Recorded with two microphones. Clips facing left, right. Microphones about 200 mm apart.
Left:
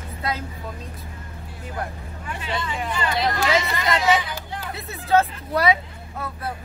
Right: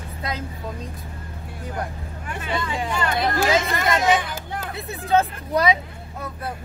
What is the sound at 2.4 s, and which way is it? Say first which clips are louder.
Speech: right 2 dB; 50° right (ahead or behind).